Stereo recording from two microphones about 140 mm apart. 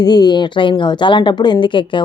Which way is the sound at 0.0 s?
30° left (ahead or behind).